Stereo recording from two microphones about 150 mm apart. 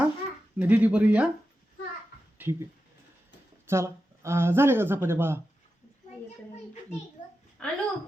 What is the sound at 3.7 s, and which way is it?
A man's voice, 20° right (ahead or behind).